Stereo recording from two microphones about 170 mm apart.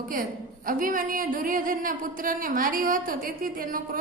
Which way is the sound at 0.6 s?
55° right (ahead or behind).